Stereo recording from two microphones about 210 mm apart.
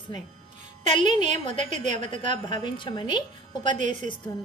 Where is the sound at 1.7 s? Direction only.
35° right (ahead or behind).